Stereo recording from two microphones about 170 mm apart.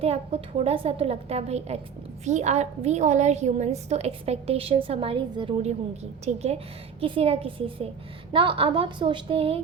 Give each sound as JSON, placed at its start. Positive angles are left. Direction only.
{"t": 0.0, "sound": "a woman's voice", "side_deg": -35}